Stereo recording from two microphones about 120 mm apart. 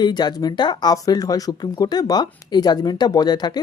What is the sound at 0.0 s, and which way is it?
Speech, 35° left (ahead or behind).